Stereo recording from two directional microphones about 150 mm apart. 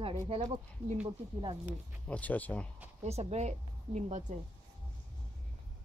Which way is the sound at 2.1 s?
10° left (ahead or behind).